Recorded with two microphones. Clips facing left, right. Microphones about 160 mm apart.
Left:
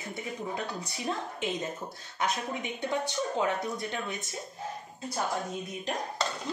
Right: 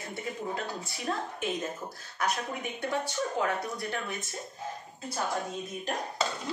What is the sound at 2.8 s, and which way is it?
A woman's voice, 20° left (ahead or behind).